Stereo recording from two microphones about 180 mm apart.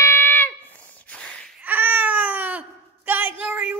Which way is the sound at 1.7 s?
10° right (ahead or behind).